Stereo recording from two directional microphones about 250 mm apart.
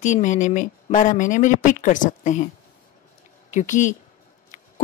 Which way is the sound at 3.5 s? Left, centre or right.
Left.